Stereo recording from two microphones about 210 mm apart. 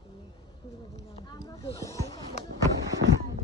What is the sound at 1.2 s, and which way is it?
A man's voice, 20° left (ahead or behind).